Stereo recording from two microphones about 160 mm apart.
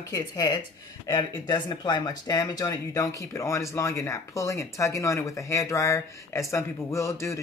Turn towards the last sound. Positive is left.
turn(degrees=20)  # may be behind; listen again after turning